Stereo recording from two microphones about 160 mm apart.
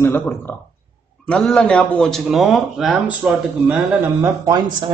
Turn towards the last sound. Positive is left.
turn(degrees=-25)  # may be behind; listen again after turning